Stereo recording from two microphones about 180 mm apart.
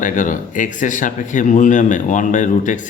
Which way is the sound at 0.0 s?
45° left (ahead or behind).